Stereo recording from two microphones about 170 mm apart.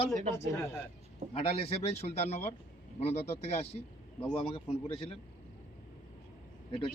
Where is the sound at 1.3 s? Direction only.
35° left (ahead or behind).